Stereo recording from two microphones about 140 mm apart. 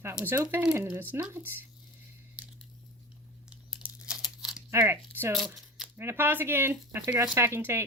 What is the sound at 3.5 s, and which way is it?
Tearing, 5° right (ahead or behind).